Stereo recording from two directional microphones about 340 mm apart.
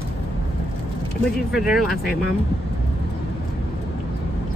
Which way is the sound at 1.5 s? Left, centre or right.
Centre.